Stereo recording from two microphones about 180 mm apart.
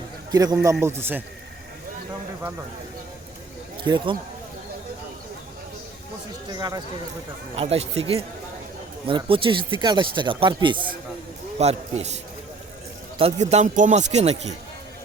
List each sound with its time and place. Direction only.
0.3 s a man's voice: 20° right (ahead or behind)
3.8 s speech: 25° right (ahead or behind)
6.5 s speech: 20° right (ahead or behind)
7.5 s speech: 35° right (ahead or behind)